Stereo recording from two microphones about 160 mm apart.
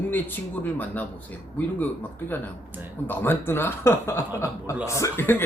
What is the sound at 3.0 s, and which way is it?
Speech, 15° left (ahead or behind).